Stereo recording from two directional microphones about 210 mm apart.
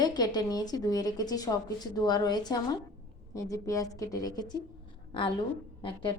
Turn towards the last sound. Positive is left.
turn(degrees=25)  # may be behind; listen again after turning